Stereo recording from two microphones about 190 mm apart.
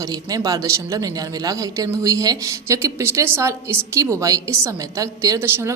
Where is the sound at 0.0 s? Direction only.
20° right (ahead or behind).